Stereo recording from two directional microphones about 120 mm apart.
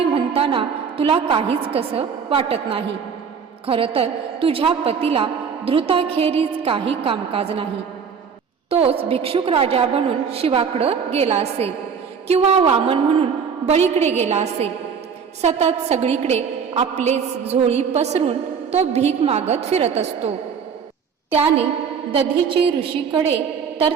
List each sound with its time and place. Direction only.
0.0 s a woman's voice: 50° right (ahead or behind)
8.7 s a woman's voice: 50° right (ahead or behind)
13.7 s a woman's voice: 65° right (ahead or behind); by 22.7 s 45° right (ahead or behind)